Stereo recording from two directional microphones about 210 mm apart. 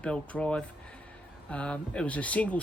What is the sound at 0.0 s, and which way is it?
Speech, 5° left (ahead or behind).